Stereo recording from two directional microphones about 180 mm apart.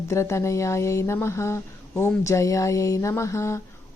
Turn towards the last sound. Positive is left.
turn(degrees=15)  # may be behind; listen again after turning